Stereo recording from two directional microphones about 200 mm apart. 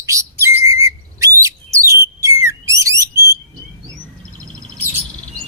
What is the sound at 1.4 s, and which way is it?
Bird, 15° right (ahead or behind).